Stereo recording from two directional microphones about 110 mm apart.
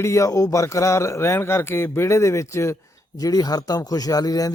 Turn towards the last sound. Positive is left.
turn(degrees=35)  # may be behind; listen again after turning